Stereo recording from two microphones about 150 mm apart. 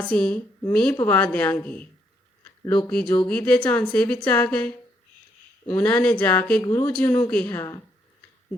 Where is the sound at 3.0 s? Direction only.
30° left (ahead or behind).